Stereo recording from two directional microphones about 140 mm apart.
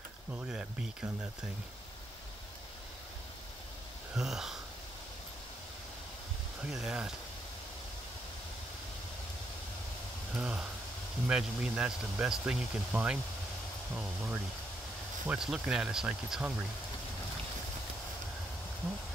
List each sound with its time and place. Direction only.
0.3 s speech: 10° right (ahead or behind)
4.1 s speech: 5° right (ahead or behind)
6.6 s speech: 5° right (ahead or behind)
10.3 s speech: 5° right (ahead or behind)